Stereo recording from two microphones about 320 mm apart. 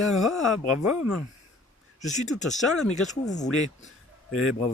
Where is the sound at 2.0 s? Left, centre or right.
Left.